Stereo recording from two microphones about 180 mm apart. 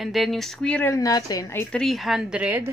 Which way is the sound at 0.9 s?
20° left (ahead or behind).